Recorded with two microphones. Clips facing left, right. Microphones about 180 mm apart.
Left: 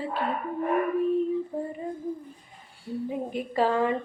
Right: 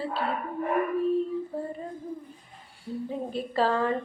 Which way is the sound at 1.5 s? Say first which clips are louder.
Left 2 dB; 20° left (ahead or behind).